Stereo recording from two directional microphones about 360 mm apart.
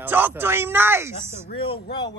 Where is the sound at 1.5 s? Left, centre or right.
Centre.